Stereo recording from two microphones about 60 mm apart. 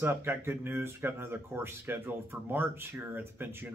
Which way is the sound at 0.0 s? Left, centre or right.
Right.